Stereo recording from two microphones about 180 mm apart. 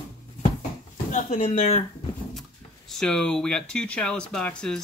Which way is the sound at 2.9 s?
5° left (ahead or behind).